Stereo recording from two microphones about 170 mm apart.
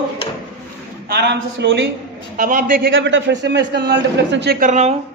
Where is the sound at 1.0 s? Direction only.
80° right.